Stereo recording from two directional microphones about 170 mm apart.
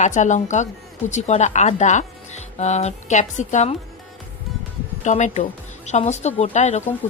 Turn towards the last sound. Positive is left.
turn(degrees=45)  # may be behind; listen again after turning